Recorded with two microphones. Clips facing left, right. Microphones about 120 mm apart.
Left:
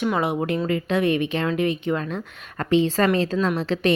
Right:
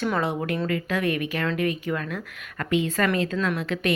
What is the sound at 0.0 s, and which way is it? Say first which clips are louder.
A woman's voice: left 3 dB; 15° left (ahead or behind).